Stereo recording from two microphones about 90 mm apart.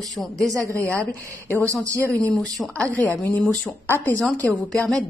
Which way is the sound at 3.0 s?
25° left (ahead or behind).